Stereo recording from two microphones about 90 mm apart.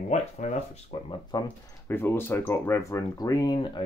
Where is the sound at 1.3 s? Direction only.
45° left (ahead or behind).